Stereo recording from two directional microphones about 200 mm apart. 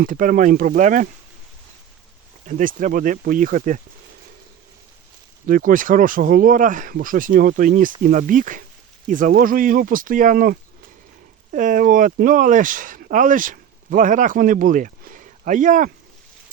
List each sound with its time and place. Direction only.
0.0 s speech: 40° right (ahead or behind)
2.5 s speech: 40° right (ahead or behind)
5.5 s speech: 45° right (ahead or behind)